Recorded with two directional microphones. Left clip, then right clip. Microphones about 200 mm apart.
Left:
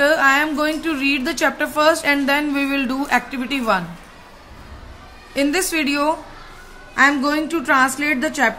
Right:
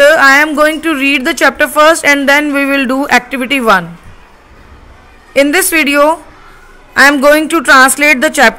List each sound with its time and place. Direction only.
0.0 s speech: 40° right (ahead or behind)
5.3 s a woman's voice: 40° right (ahead or behind)